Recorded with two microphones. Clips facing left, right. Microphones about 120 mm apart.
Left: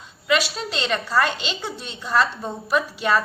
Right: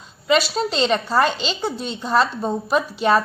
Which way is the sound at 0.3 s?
35° right (ahead or behind).